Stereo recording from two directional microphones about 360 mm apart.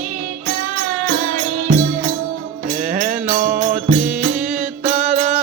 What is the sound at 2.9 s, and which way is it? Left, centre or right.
Music, right.